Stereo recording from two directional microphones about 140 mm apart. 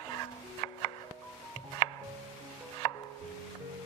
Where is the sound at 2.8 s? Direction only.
40° left (ahead or behind).